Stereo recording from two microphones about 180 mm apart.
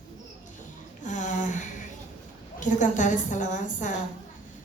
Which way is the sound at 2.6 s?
45° left (ahead or behind).